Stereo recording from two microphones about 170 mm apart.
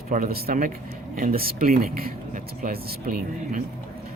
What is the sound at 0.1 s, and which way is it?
Speech, 60° right (ahead or behind).